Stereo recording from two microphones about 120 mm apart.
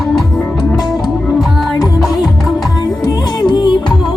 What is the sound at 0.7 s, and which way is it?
Music, 5° right (ahead or behind).